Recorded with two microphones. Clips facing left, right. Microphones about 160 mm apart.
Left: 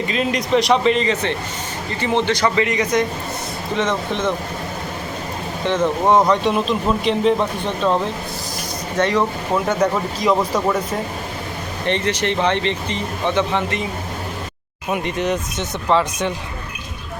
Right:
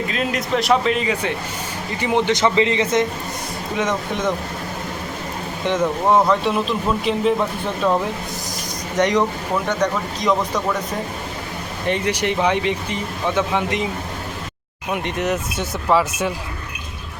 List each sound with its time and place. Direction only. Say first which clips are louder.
0.1 s a man's voice: left 6 dB; centre (ahead or behind); by 3.1 s 25° right (ahead or behind)
3.8 s speech: left 1 dB; 10° right (ahead or behind)
5.6 s speech: left 1 dB; 10° right (ahead or behind)
6.1 s a man's voice: left 1 dB; centre (ahead or behind)
9.0 s speech: right 1 dB; 15° right (ahead or behind)
9.6 s a man's voice: left 3 dB; 5° left (ahead or behind)
11.9 s speech: even; 10° right (ahead or behind)
14.9 s a man's voice: left 1 dB; centre (ahead or behind)